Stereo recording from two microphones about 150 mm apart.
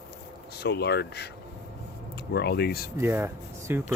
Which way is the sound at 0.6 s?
90° left.